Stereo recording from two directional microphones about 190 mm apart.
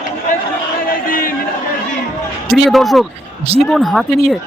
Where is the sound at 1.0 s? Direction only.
50° left (ahead or behind).